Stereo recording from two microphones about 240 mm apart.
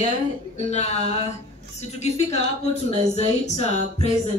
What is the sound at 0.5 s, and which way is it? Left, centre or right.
A woman's voice, left.